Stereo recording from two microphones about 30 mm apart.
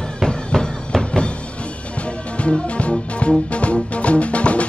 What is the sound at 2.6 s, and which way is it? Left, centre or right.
Music, left.